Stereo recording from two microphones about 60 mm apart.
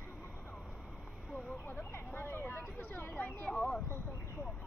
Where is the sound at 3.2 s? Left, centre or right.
Centre.